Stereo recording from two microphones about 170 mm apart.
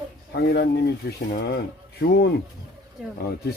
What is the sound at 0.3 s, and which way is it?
Speech, 70° left (ahead or behind).